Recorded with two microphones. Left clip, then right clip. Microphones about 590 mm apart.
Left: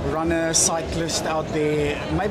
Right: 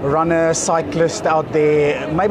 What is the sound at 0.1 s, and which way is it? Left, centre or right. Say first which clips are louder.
Speech: right 7 dB; right.